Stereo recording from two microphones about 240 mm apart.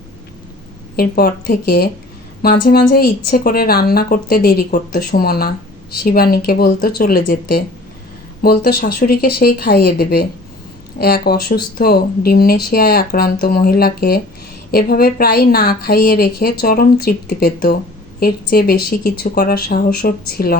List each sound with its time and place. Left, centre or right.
0.9 s a woman's voice: left